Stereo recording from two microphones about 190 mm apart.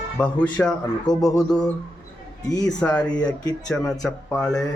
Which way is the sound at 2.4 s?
20° left (ahead or behind).